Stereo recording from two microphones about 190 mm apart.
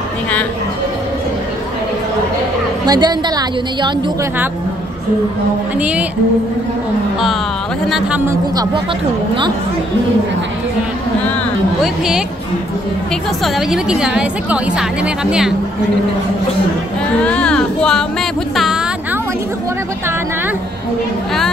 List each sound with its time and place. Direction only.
2.9 s a woman's voice: 20° right (ahead or behind)
5.8 s speech: 5° right (ahead or behind)
7.8 s a woman's voice: centre (ahead or behind)
8.3 s speech: 20° right (ahead or behind)
13.4 s a woman's voice: centre (ahead or behind)
17.2 s speech: 5° left (ahead or behind)